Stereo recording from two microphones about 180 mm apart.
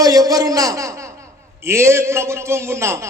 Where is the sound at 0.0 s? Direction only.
20° right (ahead or behind).